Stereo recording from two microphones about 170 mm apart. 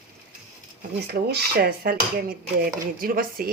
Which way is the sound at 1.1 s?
65° right (ahead or behind).